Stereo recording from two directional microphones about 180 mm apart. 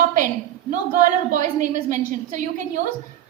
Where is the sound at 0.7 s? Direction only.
45° right (ahead or behind).